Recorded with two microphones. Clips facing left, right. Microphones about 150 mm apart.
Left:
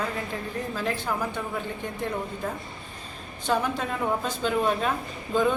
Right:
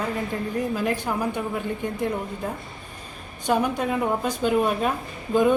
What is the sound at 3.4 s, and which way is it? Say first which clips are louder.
A woman's voice: right 3 dB; 15° right (ahead or behind).